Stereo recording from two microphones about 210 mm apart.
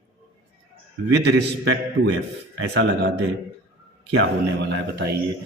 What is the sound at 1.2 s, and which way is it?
A man's voice, 55° right (ahead or behind).